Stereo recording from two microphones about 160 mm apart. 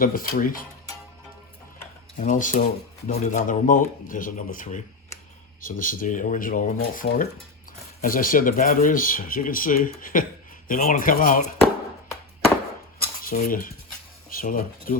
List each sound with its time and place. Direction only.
0.0 s speech: 60° left (ahead or behind)
2.1 s speech: 55° left (ahead or behind)
13.2 s speech: 65° left (ahead or behind)